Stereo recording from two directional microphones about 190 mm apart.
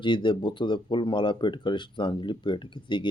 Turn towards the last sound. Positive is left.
turn(degrees=25)  # may be behind; listen again after turning